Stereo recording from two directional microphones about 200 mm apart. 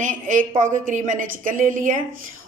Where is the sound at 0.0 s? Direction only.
40° right (ahead or behind).